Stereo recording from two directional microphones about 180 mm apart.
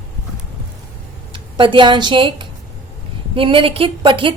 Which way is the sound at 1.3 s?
30° right (ahead or behind).